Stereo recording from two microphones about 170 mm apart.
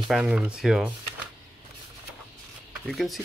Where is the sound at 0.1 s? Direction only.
5° right (ahead or behind).